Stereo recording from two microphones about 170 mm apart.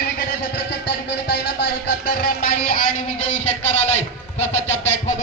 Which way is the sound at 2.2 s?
50° left (ahead or behind).